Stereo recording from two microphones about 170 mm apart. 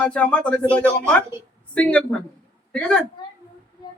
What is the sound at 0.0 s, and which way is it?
Speech, 5° left (ahead or behind).